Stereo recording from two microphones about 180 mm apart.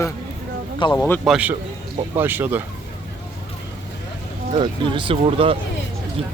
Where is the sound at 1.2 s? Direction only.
5° right (ahead or behind).